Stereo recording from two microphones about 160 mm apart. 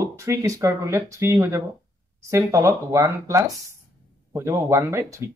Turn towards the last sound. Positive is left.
turn(degrees=-15)  # may be behind; listen again after turning